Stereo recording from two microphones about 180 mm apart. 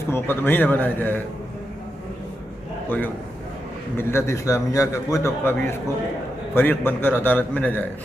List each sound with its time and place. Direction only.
0.1 s a man's voice: 10° left (ahead or behind)
3.9 s a man's voice: 15° left (ahead or behind)